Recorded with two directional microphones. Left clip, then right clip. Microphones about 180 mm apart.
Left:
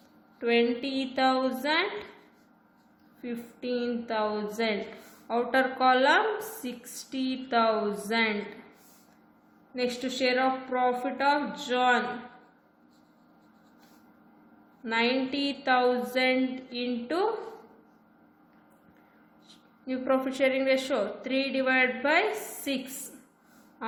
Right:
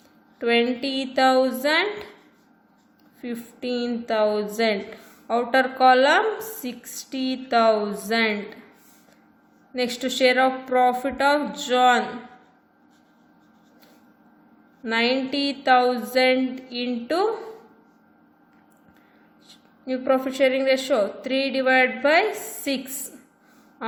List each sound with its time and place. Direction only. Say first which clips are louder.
0.3 s a woman's voice: right 4 dB; 35° right (ahead or behind)
3.2 s a woman's voice: right 5 dB; 30° right (ahead or behind)
9.7 s a woman's voice: right 5 dB; 35° right (ahead or behind)
14.8 s a woman's voice: right 5 dB; 30° right (ahead or behind)
19.5 s a woman's voice: right 7 dB; 25° right (ahead or behind)